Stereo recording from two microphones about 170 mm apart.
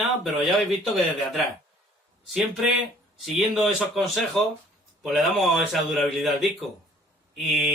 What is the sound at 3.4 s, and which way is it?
Speech, centre (ahead or behind).